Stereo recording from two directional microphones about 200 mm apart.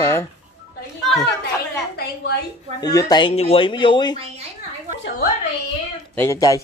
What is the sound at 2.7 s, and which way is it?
Speech, 20° left (ahead or behind).